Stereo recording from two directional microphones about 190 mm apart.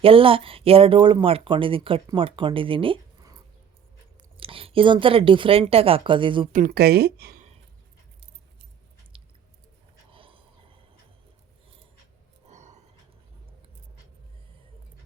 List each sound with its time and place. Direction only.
0.0 s speech: 30° right (ahead or behind)
4.4 s speech: 30° right (ahead or behind)
6.5 s speech: 50° right (ahead or behind)
9.1 s chewing: 25° right (ahead or behind)
10.1 s a sound: 30° right (ahead or behind)
12.5 s a sound: 35° right (ahead or behind)